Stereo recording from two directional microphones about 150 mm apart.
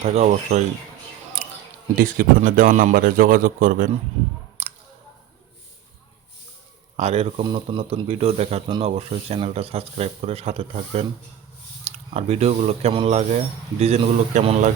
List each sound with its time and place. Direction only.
0.0 s speech: 45° right (ahead or behind)
2.0 s speech: 65° right (ahead or behind)
4.6 s a sound: 50° right (ahead or behind)
6.9 s speech: 45° right (ahead or behind)